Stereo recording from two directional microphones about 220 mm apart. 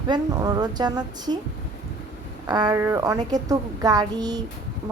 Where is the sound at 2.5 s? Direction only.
20° right (ahead or behind).